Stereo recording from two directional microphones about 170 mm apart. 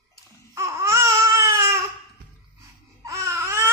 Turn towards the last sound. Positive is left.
turn(degrees=-15)  # may be behind; listen again after turning